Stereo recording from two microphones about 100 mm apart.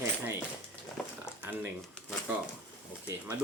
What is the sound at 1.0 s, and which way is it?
Speech, centre (ahead or behind).